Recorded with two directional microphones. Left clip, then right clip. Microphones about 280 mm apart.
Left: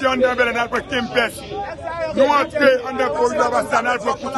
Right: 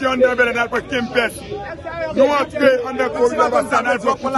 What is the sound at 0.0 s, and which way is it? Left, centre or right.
A man's voice, centre.